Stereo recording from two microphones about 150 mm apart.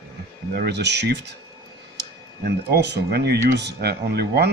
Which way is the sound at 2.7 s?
90° right.